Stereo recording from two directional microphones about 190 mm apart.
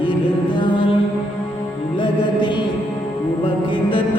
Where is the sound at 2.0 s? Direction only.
25° left (ahead or behind).